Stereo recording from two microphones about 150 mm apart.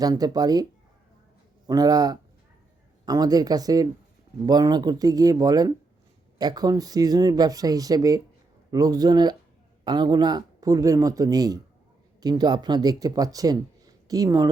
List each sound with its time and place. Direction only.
0.0 s speech: 25° right (ahead or behind)